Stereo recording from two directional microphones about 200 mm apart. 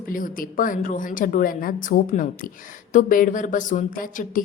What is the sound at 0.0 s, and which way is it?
A woman's voice, 45° left (ahead or behind).